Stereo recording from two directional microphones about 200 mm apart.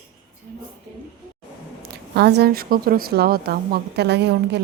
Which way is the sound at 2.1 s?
55° right (ahead or behind).